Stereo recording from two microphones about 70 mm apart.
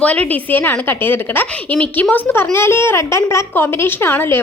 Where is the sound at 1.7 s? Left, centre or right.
Centre.